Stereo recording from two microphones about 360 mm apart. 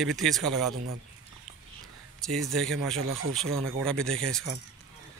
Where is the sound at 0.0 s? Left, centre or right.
Centre.